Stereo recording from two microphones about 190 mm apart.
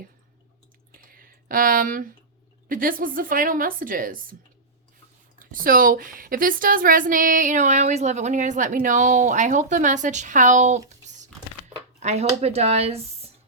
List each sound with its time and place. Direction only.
0.9 s a sound: 50° right (ahead or behind)
2.6 s a woman's voice: 45° right (ahead or behind)
5.4 s speech: 45° right (ahead or behind)
12.4 s speech: 35° right (ahead or behind)